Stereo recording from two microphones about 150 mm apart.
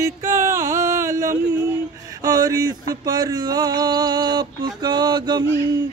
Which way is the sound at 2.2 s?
25° right (ahead or behind).